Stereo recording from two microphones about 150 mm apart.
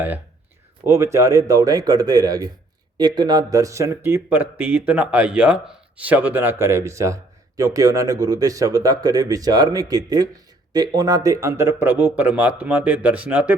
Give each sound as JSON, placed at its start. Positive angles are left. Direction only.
{"t": 0.9, "sound": "a man's voice", "side_deg": -20}